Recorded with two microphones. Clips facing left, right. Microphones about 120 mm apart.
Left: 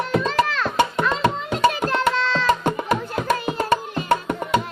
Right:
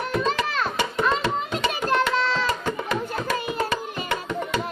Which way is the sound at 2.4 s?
50° left (ahead or behind).